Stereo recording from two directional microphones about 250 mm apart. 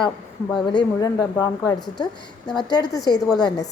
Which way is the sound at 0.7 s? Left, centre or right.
Centre.